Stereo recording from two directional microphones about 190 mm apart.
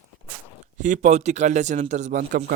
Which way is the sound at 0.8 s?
40° right (ahead or behind).